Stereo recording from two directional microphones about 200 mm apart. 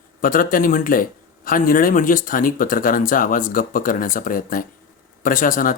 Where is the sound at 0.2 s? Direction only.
45° left (ahead or behind).